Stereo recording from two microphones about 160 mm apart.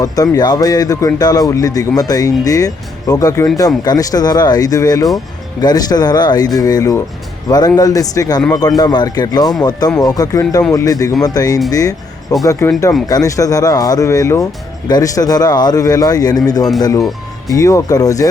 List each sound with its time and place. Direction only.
0.0 s speech: 25° left (ahead or behind)